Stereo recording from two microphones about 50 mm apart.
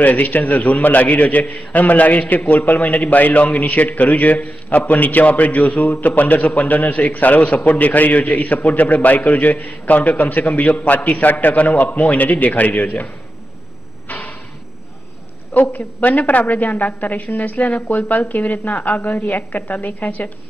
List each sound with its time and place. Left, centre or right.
0.0 s a man's voice: left
14.0 s a sound: left
15.5 s a man's voice: left